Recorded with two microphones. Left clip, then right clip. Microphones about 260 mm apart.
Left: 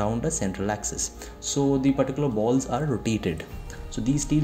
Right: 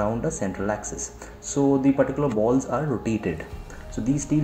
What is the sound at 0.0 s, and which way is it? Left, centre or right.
Speech, left.